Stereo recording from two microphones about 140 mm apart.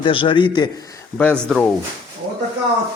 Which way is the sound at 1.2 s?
10° left (ahead or behind).